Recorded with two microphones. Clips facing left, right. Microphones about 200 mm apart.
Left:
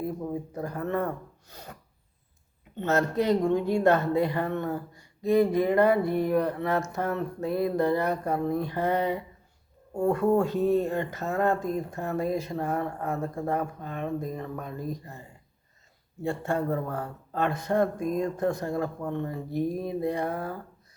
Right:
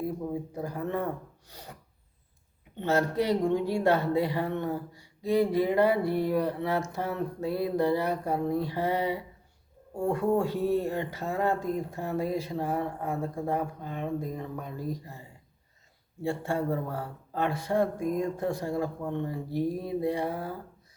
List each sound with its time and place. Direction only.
0.5 s speech: 15° right (ahead or behind)
2.7 s speech: 10° right (ahead or behind)
6.0 s a sound: 15° left (ahead or behind)
6.2 s speech: 10° right (ahead or behind)
16.2 s speech: 10° right (ahead or behind)
19.5 s a sound: 15° left (ahead or behind)
19.9 s speech: 10° right (ahead or behind)